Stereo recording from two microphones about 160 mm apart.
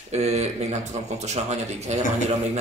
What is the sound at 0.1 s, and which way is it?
Speech, 45° right (ahead or behind).